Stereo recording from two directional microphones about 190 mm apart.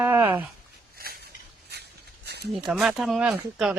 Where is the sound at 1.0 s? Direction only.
55° right (ahead or behind).